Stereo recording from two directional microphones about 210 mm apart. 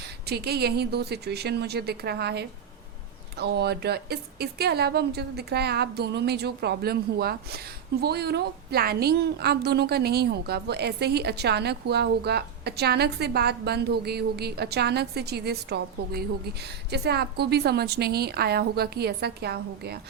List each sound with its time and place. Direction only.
0.3 s a woman's voice: 50° right (ahead or behind)